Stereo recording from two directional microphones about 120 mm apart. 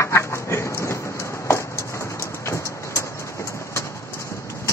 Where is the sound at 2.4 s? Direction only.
25° left (ahead or behind).